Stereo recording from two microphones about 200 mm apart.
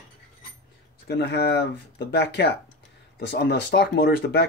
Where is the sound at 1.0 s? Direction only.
60° left (ahead or behind).